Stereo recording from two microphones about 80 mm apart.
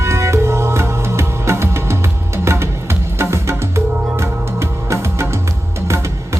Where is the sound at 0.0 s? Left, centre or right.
Right.